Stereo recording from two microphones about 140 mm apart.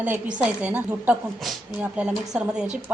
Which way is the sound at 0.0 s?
10° right (ahead or behind).